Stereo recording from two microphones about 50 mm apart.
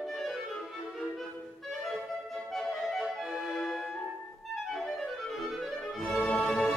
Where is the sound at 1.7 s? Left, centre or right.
Centre.